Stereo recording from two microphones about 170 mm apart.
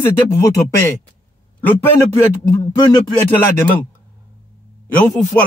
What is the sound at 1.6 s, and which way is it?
Speech, 10° left (ahead or behind).